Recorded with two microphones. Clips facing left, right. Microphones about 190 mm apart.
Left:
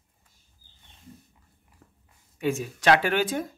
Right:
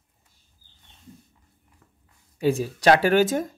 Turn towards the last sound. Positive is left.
turn(degrees=-45)  # may be behind; listen again after turning